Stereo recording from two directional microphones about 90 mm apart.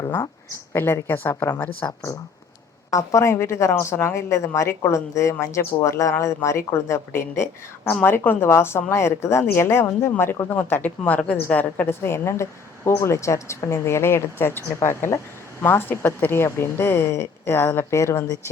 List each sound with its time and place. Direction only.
0.7 s speech: 25° left (ahead or behind)
2.9 s a woman's voice: 35° left (ahead or behind)